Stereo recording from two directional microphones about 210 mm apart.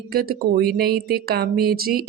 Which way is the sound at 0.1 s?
45° right (ahead or behind).